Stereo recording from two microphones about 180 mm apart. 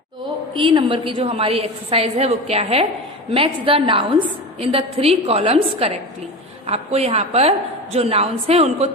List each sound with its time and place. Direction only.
0.5 s a woman's voice: 25° right (ahead or behind)